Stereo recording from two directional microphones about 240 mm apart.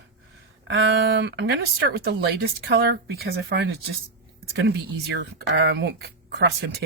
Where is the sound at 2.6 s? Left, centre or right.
Right.